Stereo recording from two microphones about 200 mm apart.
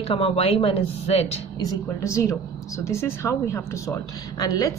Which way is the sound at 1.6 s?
15° left (ahead or behind).